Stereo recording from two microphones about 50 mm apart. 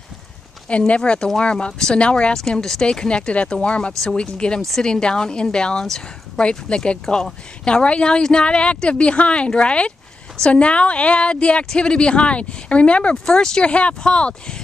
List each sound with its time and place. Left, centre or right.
0.7 s speech: left
2.3 s speech: centre
4.6 s speech: centre